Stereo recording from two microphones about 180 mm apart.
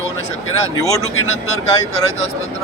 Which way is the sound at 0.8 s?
20° left (ahead or behind).